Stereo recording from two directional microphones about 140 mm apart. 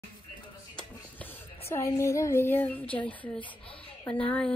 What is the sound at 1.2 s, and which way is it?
Speech, 15° left (ahead or behind).